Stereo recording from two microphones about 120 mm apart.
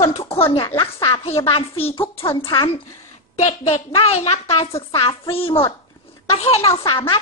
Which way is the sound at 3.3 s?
55° left (ahead or behind).